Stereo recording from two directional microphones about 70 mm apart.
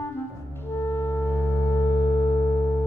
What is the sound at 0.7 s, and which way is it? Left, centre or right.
Music, left.